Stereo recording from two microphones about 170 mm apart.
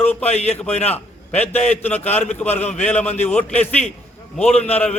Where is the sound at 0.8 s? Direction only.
40° left (ahead or behind).